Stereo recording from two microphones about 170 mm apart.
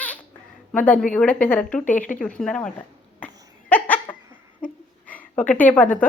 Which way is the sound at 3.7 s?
10° left (ahead or behind).